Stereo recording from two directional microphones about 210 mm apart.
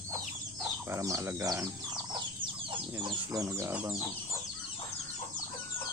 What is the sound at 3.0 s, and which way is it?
Speech, 20° right (ahead or behind).